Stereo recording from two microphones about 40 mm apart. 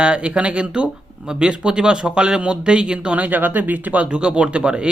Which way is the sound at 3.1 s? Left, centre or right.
Right.